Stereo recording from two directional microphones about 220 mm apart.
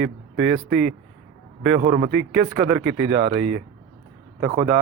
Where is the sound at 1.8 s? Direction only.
35° right (ahead or behind).